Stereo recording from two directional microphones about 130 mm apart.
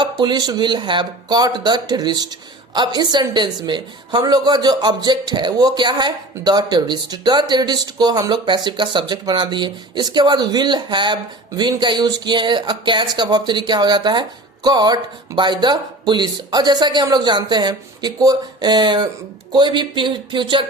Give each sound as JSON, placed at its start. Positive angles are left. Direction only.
{"t": 0.0, "sound": "speech", "side_deg": -35}